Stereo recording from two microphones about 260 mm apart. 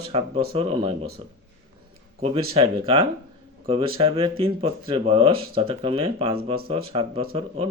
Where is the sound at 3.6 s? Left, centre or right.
Right.